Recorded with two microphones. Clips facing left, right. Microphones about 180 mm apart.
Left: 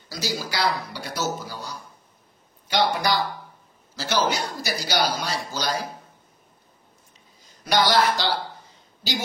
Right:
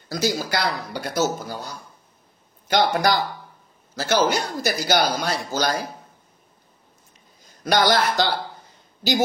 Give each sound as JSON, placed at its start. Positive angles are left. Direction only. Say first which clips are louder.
{"t": 0.1, "sound": "speech", "louder": "right 6 dB", "side_deg": -50}
{"t": 2.7, "sound": "speech", "louder": "right 3 dB", "side_deg": -45}
{"t": 7.6, "sound": "speech", "louder": "right 1 dB", "side_deg": -50}